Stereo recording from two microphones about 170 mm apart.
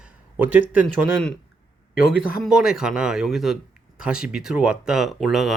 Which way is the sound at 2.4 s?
5° right (ahead or behind).